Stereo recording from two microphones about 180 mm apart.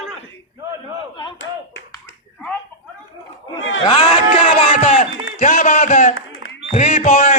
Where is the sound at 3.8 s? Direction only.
35° left (ahead or behind).